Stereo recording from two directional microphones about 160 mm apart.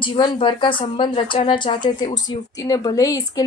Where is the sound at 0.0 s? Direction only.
30° left (ahead or behind).